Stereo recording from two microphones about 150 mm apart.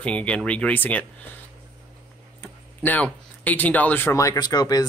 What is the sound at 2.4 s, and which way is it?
Speech, 10° left (ahead or behind).